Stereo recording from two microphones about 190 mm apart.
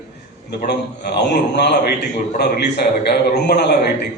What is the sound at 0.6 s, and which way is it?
A man's voice, 60° left (ahead or behind).